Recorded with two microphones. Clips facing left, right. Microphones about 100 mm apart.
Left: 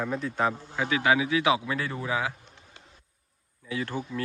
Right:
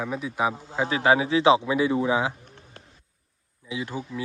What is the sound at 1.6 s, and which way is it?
Speech, 15° right (ahead or behind).